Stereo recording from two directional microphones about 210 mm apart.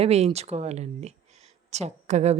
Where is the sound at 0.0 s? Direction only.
30° right (ahead or behind).